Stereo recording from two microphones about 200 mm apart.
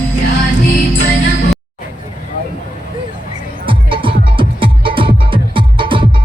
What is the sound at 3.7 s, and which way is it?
Music, 25° right (ahead or behind).